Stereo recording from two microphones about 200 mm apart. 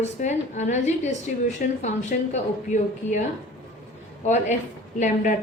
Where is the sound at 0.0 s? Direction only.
35° left (ahead or behind).